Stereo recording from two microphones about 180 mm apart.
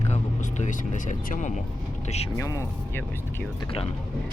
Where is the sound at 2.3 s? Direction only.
15° left (ahead or behind).